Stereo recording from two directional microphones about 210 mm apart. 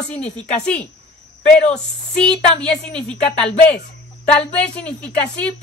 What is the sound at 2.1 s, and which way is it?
A woman's voice, 5° left (ahead or behind).